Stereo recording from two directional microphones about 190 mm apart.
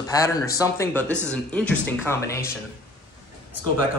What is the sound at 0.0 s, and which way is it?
Speech, 20° left (ahead or behind).